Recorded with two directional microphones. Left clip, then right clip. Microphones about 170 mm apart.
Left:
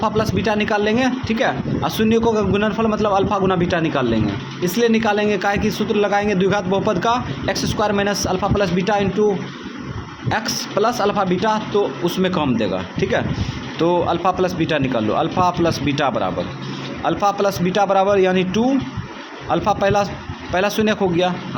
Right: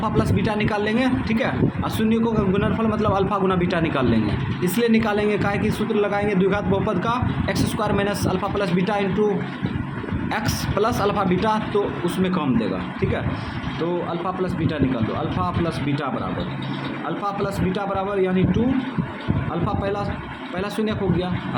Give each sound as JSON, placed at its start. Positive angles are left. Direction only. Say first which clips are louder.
{"t": 0.0, "sound": "a man's voice", "louder": "left 4 dB", "side_deg": 25}
{"t": 10.2, "sound": "a man's voice", "louder": "left 5 dB", "side_deg": 20}
{"t": 19.6, "sound": "a man's voice", "louder": "left 9 dB", "side_deg": 35}